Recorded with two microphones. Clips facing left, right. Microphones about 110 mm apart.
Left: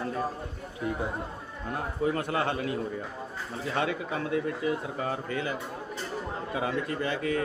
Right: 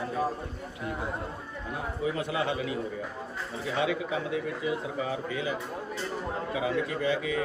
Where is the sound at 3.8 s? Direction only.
50° left (ahead or behind).